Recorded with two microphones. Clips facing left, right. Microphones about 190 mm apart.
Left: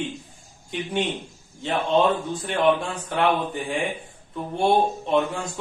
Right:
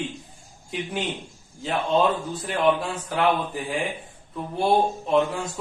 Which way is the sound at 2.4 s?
Centre (ahead or behind).